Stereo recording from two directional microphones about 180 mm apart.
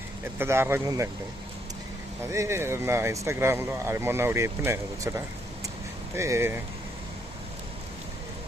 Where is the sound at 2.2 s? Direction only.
15° right (ahead or behind).